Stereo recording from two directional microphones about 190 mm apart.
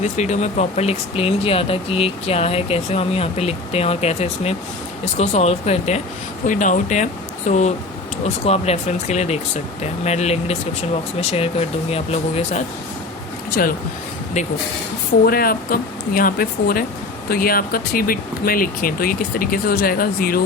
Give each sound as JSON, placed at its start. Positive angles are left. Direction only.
{"t": 0.0, "sound": "speech", "side_deg": 40}
{"t": 15.2, "sound": "speech", "side_deg": 50}